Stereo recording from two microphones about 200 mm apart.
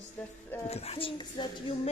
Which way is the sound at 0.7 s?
30° left (ahead or behind).